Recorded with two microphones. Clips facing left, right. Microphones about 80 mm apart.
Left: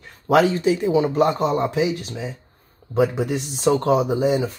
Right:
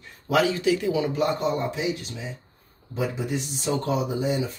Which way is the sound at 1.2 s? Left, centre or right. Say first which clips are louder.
Left 5 dB; left.